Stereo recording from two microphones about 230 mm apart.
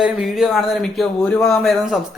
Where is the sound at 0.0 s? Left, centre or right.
Centre.